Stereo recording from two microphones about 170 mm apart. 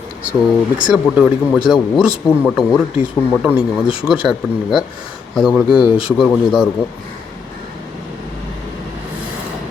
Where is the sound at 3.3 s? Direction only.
5° right (ahead or behind).